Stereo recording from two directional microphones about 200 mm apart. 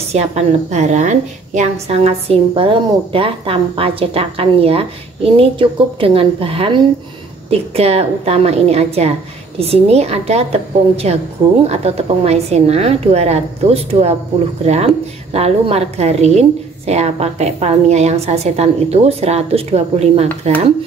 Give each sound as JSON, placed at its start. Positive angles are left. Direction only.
{"t": 0.1, "sound": "a woman's voice", "side_deg": -35}